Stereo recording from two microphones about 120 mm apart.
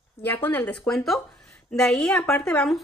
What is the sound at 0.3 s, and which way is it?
Speech, 15° left (ahead or behind).